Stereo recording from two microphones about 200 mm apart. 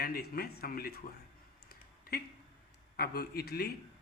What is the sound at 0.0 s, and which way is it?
A man's voice, 50° left (ahead or behind).